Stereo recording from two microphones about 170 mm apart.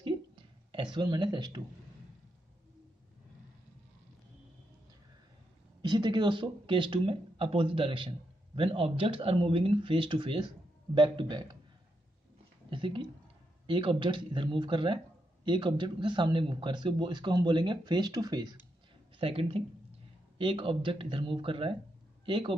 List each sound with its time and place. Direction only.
0.9 s a man's voice: 25° right (ahead or behind)
5.8 s a man's voice: 25° right (ahead or behind)
12.6 s a man's voice: 30° right (ahead or behind)
19.1 s speech: 35° right (ahead or behind)